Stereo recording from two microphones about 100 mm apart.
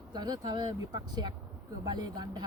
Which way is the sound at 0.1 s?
45° right (ahead or behind).